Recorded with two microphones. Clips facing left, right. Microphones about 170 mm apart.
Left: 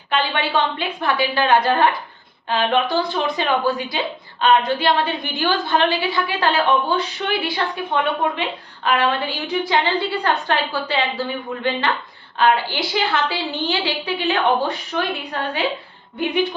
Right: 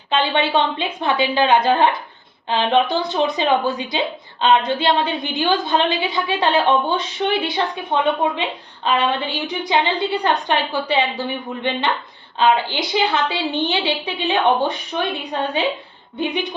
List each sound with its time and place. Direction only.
0.1 s a woman's voice: 20° right (ahead or behind)